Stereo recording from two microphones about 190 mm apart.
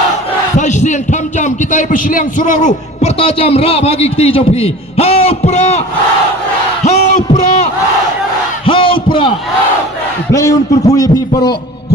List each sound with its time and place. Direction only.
0.5 s battle cry: 40° left (ahead or behind)
1.4 s a man's voice: 40° left (ahead or behind)
6.8 s a sound: 35° left (ahead or behind)
10.3 s a man's voice: 15° left (ahead or behind)